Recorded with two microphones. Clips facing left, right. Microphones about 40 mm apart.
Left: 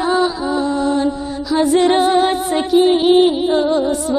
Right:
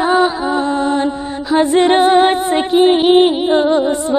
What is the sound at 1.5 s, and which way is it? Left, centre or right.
Music, right.